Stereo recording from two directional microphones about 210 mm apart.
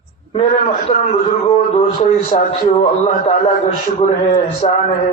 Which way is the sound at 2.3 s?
30° left (ahead or behind).